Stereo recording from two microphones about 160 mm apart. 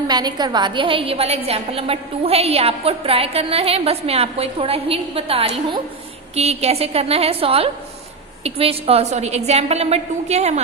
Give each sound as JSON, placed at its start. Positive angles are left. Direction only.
{"t": 0.1, "sound": "a woman's voice", "side_deg": -25}